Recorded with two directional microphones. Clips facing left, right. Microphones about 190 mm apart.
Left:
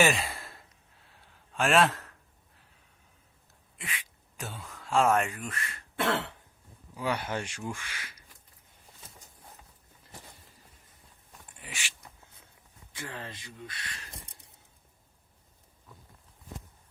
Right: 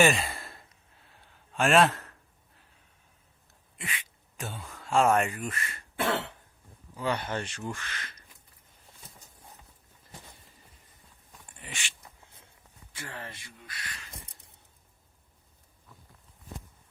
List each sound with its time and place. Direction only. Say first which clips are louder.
0.0 s sigh: right 2 dB; centre (ahead or behind)
1.5 s a man's voice: right 2 dB; centre (ahead or behind)
3.8 s speech: right 2 dB; centre (ahead or behind)
6.9 s speech: right 1 dB; 10° left (ahead or behind)
11.6 s speech: right 1 dB; 5° left (ahead or behind)
12.9 s speech: left 1 dB; 15° left (ahead or behind)